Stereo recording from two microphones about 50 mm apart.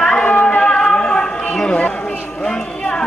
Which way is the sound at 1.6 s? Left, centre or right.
Centre.